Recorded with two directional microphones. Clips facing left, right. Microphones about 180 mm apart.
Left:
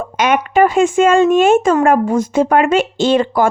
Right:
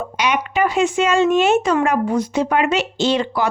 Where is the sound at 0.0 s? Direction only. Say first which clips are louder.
Left 5 dB; 50° left (ahead or behind).